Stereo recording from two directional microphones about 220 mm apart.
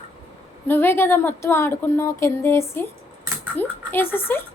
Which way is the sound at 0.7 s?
10° left (ahead or behind).